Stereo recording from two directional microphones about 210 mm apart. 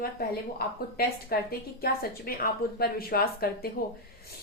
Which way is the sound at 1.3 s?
45° left (ahead or behind).